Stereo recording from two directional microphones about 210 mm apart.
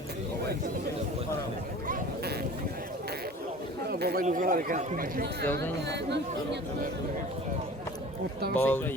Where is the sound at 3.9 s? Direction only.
50° right (ahead or behind).